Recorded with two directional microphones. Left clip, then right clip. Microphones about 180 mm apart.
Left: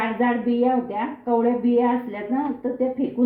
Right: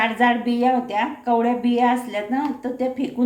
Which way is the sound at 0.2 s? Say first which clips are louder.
Right 3 dB; 20° right (ahead or behind).